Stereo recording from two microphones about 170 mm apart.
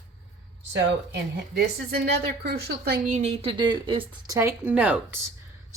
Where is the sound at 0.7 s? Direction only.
85° right.